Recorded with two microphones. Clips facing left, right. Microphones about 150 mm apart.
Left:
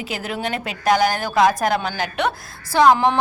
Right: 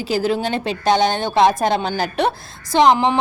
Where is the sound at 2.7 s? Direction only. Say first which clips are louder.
Right 1 dB; 20° right (ahead or behind).